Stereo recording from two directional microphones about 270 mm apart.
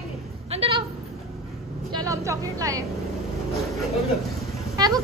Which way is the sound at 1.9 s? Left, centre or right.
Centre.